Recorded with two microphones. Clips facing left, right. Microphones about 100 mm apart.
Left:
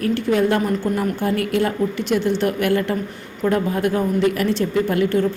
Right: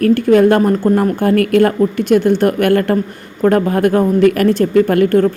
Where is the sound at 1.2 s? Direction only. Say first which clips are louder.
Right 9 dB; 60° right (ahead or behind).